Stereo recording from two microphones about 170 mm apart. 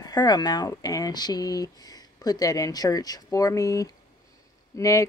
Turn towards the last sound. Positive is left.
turn(degrees=20)  # may be behind; listen again after turning